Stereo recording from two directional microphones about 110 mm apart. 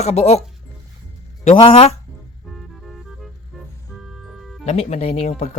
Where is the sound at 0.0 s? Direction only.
80° left.